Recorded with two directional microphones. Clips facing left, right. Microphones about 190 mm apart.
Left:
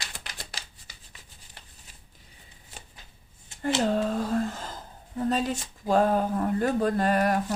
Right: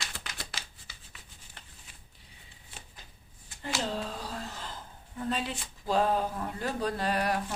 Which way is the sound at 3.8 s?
50° left (ahead or behind).